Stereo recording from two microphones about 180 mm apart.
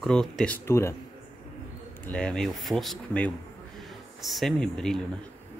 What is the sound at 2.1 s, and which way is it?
Speech, 5° left (ahead or behind).